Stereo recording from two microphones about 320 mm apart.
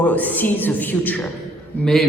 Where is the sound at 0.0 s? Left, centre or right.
Centre.